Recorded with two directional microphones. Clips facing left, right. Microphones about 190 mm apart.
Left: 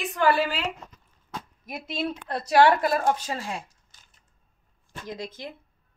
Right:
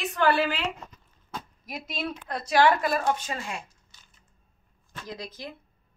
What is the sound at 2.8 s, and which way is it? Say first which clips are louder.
Speech: left 2 dB; 35° left (ahead or behind).